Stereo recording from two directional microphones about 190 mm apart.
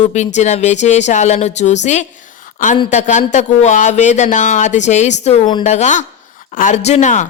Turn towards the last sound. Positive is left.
turn(degrees=40)  # may be behind; listen again after turning